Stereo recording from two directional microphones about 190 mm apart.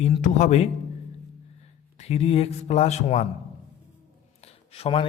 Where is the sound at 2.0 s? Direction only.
35° left (ahead or behind).